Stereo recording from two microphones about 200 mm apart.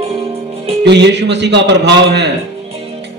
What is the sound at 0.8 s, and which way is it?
A man's voice, 60° right (ahead or behind).